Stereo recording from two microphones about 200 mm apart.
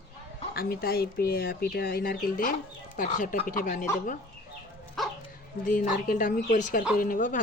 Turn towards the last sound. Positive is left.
turn(degrees=40)  # may be behind; listen again after turning